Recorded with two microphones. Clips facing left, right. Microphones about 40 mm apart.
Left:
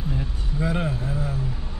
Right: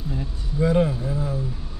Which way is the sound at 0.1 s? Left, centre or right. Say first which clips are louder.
Even; centre.